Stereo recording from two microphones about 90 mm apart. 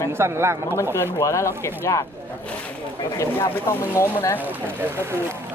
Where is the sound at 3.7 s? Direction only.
25° left (ahead or behind).